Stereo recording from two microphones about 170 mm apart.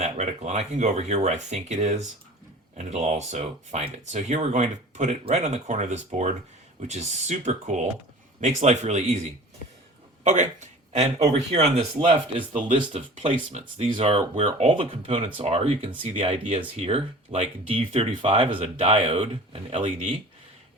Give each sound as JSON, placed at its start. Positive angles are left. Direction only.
{"t": 0.0, "sound": "speech", "side_deg": -40}
{"t": 10.2, "sound": "speech", "side_deg": -45}